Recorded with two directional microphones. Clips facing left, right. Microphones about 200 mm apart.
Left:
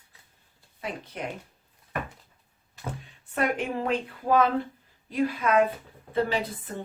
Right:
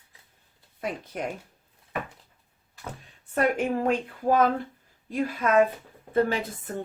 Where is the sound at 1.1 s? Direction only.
45° right (ahead or behind).